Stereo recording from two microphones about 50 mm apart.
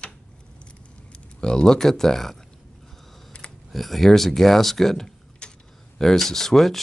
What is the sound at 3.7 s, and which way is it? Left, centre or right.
Speech, centre.